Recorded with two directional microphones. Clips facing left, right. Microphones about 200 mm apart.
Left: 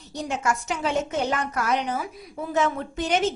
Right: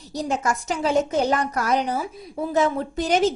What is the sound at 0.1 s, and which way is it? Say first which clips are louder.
A woman's voice: right 2 dB; 35° right (ahead or behind).